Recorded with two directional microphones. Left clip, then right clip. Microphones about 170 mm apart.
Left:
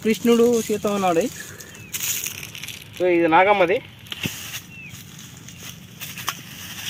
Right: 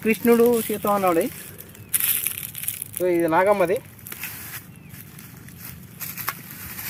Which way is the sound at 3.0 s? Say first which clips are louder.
Left 3 dB; 40° left (ahead or behind).